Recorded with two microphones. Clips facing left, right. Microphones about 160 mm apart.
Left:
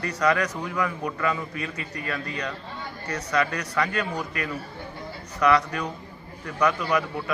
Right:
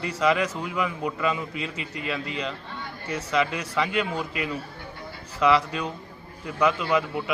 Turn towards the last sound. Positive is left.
turn(degrees=-20)  # may be behind; listen again after turning